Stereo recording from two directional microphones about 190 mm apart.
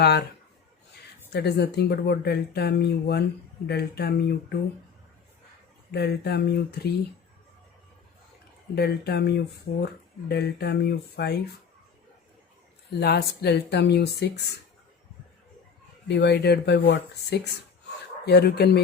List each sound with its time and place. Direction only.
1.3 s speech: 60° left (ahead or behind)
5.9 s speech: 60° left (ahead or behind)
8.7 s speech: 60° left (ahead or behind)
12.9 s speech: 60° left (ahead or behind)
16.0 s speech: 65° left (ahead or behind)